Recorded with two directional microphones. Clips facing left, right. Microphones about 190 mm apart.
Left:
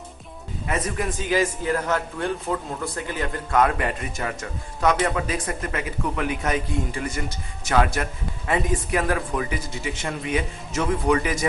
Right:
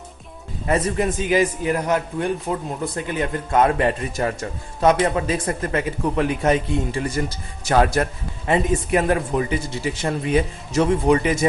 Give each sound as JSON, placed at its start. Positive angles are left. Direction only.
{"t": 0.7, "sound": "a man's voice", "side_deg": -30}
{"t": 8.5, "sound": "a man's voice", "side_deg": -25}